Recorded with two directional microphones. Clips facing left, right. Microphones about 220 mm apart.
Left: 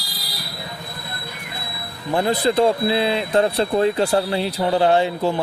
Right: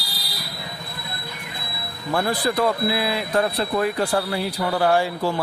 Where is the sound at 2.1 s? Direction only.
20° left (ahead or behind).